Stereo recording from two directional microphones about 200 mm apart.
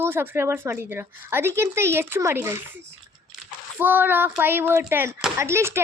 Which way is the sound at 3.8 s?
10° right (ahead or behind).